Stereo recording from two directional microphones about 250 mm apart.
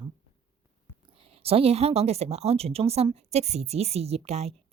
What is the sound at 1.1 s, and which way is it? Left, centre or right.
A woman's voice, right.